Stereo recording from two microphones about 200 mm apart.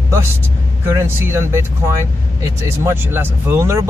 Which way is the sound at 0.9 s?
15° right (ahead or behind).